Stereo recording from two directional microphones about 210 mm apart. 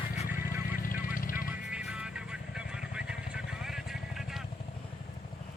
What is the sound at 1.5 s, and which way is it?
Vehicle, 5° right (ahead or behind).